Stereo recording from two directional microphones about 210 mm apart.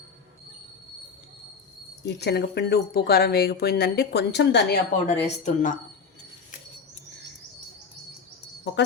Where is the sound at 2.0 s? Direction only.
50° left (ahead or behind).